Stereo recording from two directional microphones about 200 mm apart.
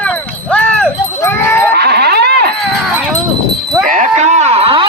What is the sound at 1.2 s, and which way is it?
Livestock, 10° left (ahead or behind).